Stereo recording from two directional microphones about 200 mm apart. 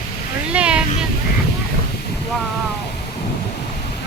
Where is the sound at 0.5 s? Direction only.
5° right (ahead or behind).